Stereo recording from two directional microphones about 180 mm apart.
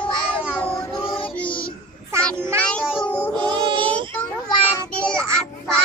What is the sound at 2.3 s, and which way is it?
Child singing, 15° right (ahead or behind).